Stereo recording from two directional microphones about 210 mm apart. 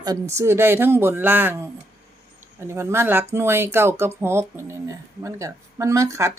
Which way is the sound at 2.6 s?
10° right (ahead or behind).